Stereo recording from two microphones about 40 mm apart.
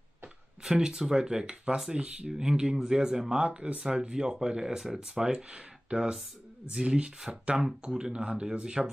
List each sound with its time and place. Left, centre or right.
0.7 s speech: centre
7.3 s speech: centre
8.8 s speech: centre